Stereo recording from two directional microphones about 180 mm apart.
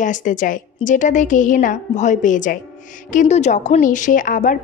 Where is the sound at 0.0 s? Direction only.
45° left (ahead or behind).